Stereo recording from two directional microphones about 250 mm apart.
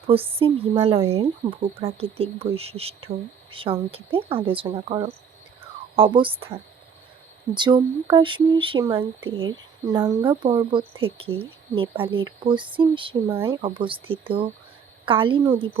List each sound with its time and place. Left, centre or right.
0.1 s speech: right